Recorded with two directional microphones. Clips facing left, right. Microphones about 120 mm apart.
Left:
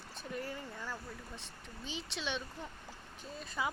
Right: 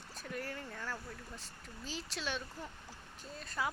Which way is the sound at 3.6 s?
5° left (ahead or behind).